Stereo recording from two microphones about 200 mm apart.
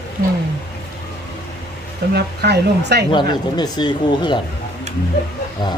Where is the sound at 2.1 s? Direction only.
55° right (ahead or behind).